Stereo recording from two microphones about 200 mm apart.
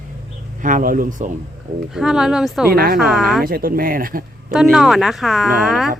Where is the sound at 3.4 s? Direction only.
45° right (ahead or behind).